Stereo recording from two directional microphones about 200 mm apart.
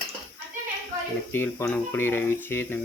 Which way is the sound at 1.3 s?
10° left (ahead or behind).